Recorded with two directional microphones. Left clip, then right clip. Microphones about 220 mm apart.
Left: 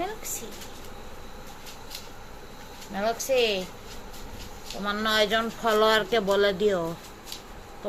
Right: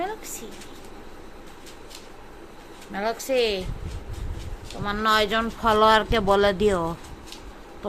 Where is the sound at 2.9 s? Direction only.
35° right (ahead or behind).